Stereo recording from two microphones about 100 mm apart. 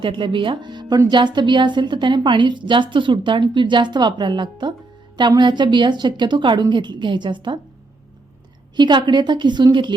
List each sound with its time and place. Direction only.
0.0 s a woman's voice: 60° right (ahead or behind)
8.7 s a woman's voice: 50° right (ahead or behind)